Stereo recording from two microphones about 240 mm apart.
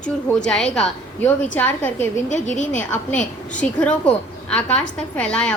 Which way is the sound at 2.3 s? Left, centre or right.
Left.